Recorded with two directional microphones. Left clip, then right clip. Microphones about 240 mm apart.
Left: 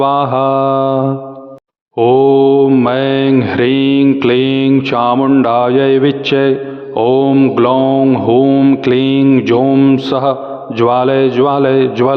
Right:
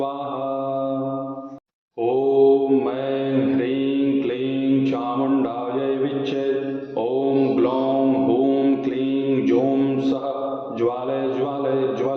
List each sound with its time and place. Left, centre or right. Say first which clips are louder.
0.0 s a man's voice: left 14 dB; left
2.0 s mantra: left 9 dB; left
6.9 s a man's voice: left 11 dB; left